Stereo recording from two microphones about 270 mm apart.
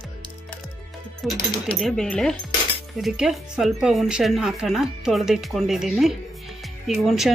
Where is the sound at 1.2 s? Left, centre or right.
Centre.